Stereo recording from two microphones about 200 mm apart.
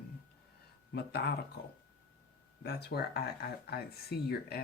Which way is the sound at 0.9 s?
55° left (ahead or behind).